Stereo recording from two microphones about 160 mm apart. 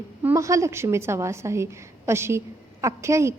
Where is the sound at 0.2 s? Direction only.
15° right (ahead or behind).